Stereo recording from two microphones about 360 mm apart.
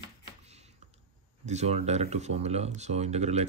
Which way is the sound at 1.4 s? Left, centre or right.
Centre.